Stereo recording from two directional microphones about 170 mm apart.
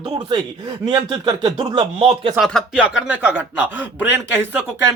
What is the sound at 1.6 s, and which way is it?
Speech, 35° right (ahead or behind).